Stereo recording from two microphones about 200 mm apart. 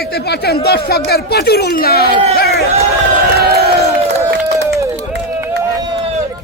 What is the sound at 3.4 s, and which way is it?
Crowd, 50° right (ahead or behind).